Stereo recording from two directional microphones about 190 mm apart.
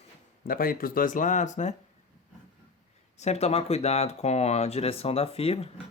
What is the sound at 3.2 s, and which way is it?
Speech, 35° left (ahead or behind).